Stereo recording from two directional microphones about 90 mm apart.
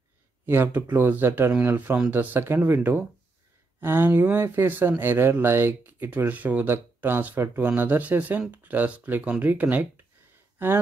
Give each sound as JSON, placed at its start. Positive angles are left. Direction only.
{"t": 0.5, "sound": "speech", "side_deg": -25}